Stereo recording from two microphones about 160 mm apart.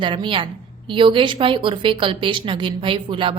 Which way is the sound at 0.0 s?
30° right (ahead or behind).